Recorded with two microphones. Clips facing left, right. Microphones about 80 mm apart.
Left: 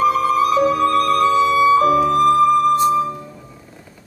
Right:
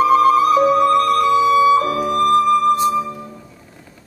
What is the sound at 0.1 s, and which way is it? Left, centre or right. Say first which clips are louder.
Music: right 4 dB; right.